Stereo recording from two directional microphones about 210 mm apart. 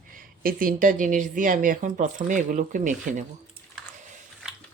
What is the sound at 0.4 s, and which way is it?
Speech, 40° right (ahead or behind).